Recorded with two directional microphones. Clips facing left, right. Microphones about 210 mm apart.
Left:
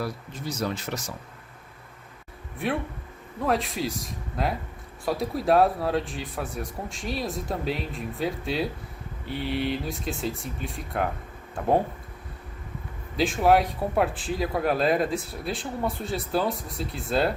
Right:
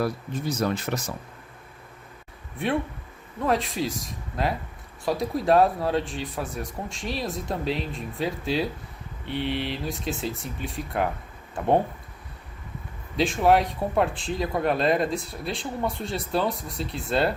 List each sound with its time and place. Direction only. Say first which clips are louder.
0.0 s speech: right 5 dB; 55° right (ahead or behind)
2.6 s speech: right 2 dB; centre (ahead or behind)
13.1 s speech: even; centre (ahead or behind)